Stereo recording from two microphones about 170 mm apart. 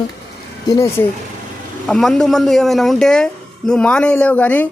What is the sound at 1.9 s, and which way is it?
A man's voice, centre (ahead or behind).